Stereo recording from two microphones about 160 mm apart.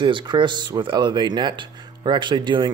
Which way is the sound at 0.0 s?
30° right (ahead or behind).